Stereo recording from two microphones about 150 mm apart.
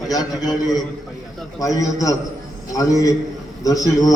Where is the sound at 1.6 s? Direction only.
25° left (ahead or behind).